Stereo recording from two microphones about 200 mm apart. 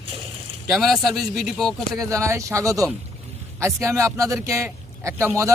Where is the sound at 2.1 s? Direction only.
15° right (ahead or behind).